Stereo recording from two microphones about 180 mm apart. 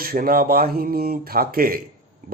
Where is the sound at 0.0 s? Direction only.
55° right (ahead or behind).